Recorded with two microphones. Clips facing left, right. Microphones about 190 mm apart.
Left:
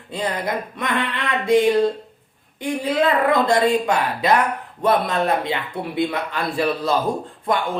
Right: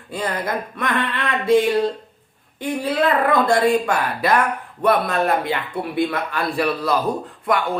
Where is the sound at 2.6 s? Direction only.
15° left (ahead or behind).